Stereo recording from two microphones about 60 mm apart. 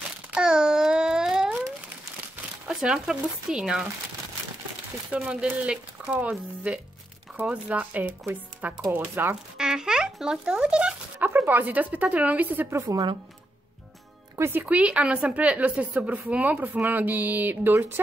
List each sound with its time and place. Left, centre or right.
0.3 s a sound: centre
2.8 s speech: centre
5.1 s a woman's voice: centre; by 9.3 s right
9.6 s speech: centre
11.1 s speech: right
12.7 s a woman's voice: right
14.7 s a woman's voice: right